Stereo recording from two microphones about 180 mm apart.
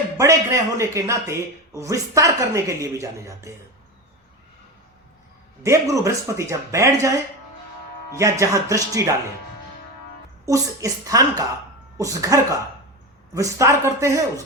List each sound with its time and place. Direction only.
0.2 s speech: 15° right (ahead or behind)
5.6 s speech: 15° right (ahead or behind)
10.4 s a woman's voice: 20° right (ahead or behind)